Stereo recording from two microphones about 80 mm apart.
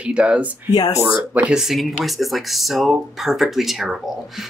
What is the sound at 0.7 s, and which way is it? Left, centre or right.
Speech, left.